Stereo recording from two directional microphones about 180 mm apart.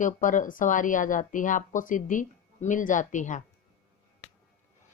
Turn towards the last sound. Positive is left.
turn(degrees=45)  # may be behind; listen again after turning